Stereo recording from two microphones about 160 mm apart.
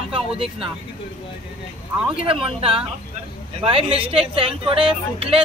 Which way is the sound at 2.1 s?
35° right (ahead or behind).